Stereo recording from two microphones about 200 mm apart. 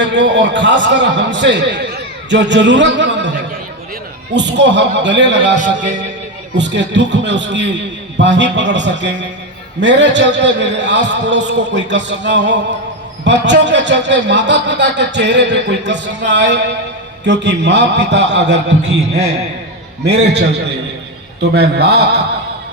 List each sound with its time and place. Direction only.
0.0 s a man's voice: 65° right (ahead or behind)
4.4 s a man's voice: 60° right (ahead or behind)
20.1 s a man's voice: 60° right (ahead or behind)